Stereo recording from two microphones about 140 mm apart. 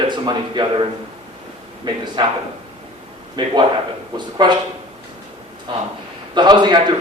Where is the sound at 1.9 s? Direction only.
35° right (ahead or behind).